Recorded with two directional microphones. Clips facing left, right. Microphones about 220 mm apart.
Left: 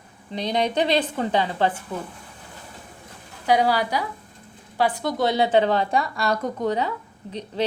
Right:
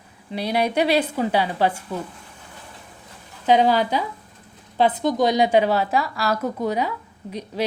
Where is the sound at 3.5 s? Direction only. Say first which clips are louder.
Right 3 dB; 20° right (ahead or behind).